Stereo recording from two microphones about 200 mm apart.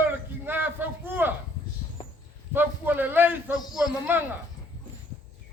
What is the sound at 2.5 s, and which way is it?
A man's voice, 10° right (ahead or behind).